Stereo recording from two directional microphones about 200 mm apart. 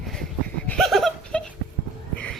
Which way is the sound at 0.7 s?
Centre (ahead or behind).